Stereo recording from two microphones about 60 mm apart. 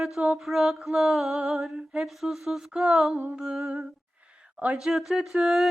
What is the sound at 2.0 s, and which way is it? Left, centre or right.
Speech, centre.